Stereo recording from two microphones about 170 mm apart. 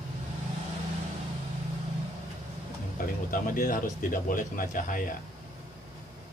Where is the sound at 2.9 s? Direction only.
55° left (ahead or behind).